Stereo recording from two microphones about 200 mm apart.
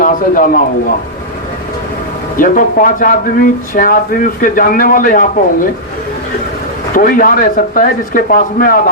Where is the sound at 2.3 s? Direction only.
40° left (ahead or behind).